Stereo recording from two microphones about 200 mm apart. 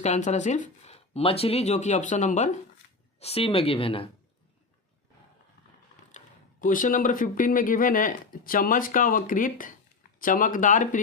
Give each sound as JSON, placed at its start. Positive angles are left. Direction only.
{"t": 0.0, "sound": "speech", "side_deg": 35}
{"t": 6.1, "sound": "speech", "side_deg": 40}